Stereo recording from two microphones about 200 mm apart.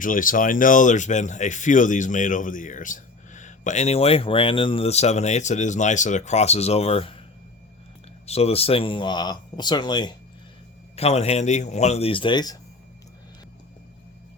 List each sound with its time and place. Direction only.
0.0 s speech: 40° left (ahead or behind)
8.3 s speech: 30° left (ahead or behind)
10.9 s speech: 30° left (ahead or behind)